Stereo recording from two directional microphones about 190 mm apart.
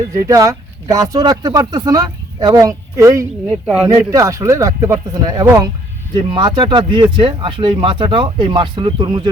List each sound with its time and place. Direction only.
0.3 s speech: 15° right (ahead or behind)